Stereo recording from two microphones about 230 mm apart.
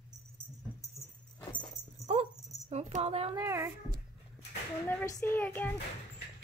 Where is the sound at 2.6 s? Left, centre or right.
Right.